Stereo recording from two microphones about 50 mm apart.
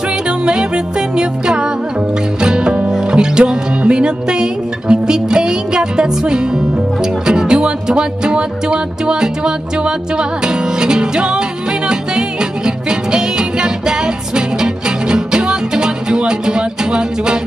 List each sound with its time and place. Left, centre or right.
0.5 s music: centre